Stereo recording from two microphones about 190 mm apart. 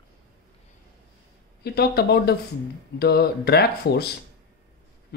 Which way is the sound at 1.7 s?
55° left (ahead or behind).